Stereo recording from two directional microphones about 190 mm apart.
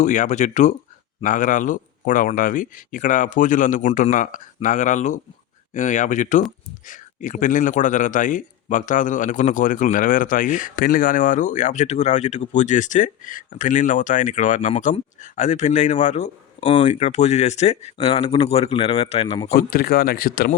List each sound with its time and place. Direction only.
0.0 s a man's voice: 40° left (ahead or behind)
16.8 s a man's voice: 40° left (ahead or behind)
19.5 s a man's voice: 50° left (ahead or behind)